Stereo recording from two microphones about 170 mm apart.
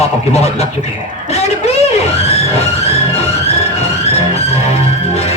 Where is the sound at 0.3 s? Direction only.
40° left (ahead or behind).